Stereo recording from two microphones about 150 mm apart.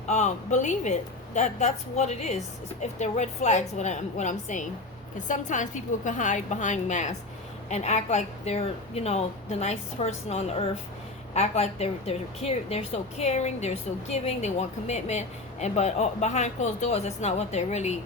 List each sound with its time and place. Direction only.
0.1 s a woman's voice: 50° left (ahead or behind)